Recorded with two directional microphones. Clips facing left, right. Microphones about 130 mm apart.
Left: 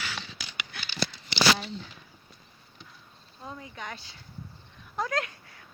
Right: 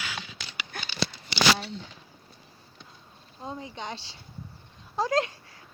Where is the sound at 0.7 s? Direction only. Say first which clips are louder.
Right 4 dB; 45° right (ahead or behind).